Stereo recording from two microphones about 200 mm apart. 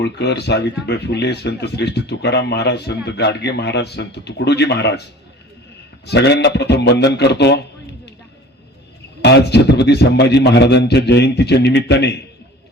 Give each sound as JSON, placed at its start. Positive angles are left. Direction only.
{"t": 0.0, "sound": "speech", "side_deg": 60}
{"t": 6.1, "sound": "speech", "side_deg": 55}
{"t": 9.2, "sound": "speech", "side_deg": 55}